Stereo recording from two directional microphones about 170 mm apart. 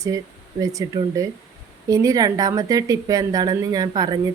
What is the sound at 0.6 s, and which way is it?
Speech, 20° right (ahead or behind).